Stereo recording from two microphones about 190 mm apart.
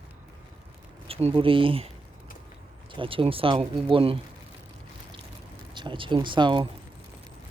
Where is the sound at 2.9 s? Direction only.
25° right (ahead or behind).